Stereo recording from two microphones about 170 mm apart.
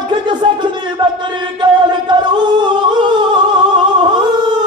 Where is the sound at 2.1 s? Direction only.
25° right (ahead or behind).